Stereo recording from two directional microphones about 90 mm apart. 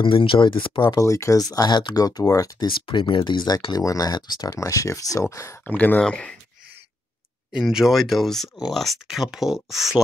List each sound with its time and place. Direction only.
0.0 s speech: 75° left (ahead or behind)
0.8 s speech: 40° left (ahead or behind)
2.6 s speech: 65° left (ahead or behind)
3.7 s speech: 40° left (ahead or behind)
5.6 s speech: 20° left (ahead or behind)
7.5 s speech: 5° right (ahead or behind)